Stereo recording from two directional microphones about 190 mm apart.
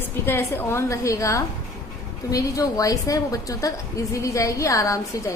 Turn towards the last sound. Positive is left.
turn(degrees=15)  # may be behind; listen again after turning